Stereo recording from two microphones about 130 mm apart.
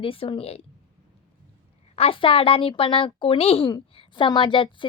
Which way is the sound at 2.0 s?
45° left (ahead or behind).